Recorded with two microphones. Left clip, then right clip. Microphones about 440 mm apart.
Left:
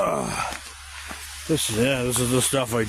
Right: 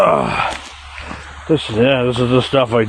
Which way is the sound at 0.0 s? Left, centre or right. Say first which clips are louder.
Right 11 dB; left.